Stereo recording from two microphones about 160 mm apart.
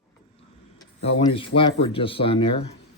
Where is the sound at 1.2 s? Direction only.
35° left (ahead or behind).